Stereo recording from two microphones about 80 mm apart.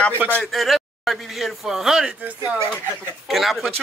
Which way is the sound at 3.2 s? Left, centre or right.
Centre.